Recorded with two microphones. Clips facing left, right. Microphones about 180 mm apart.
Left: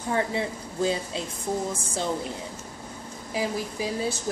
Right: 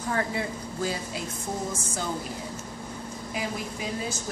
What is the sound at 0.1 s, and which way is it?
Speech, 25° left (ahead or behind).